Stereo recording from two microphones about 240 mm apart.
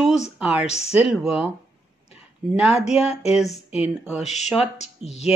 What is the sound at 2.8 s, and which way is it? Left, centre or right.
Speech, left.